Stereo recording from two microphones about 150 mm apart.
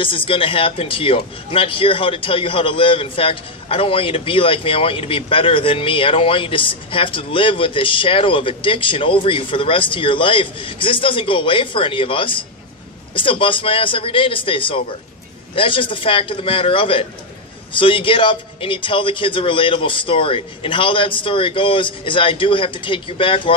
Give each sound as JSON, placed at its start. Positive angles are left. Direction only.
{"t": 0.0, "sound": "speech", "side_deg": 35}